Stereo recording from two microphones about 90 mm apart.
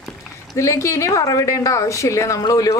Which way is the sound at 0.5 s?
35° left (ahead or behind).